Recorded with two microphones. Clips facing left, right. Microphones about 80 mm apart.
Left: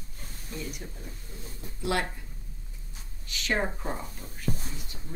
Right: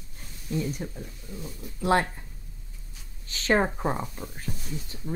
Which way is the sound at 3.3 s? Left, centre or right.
Right.